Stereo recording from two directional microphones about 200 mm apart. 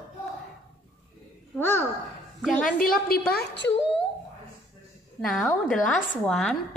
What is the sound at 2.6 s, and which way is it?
A woman's voice, 45° left (ahead or behind).